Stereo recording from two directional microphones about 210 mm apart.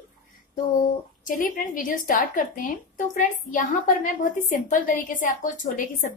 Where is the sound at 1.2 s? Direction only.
40° left (ahead or behind).